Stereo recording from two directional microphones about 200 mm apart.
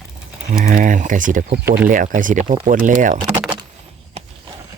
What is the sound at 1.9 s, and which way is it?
Speech, 40° right (ahead or behind).